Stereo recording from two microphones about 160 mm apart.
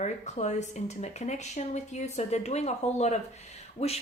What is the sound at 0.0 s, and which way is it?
Speech, 45° left (ahead or behind).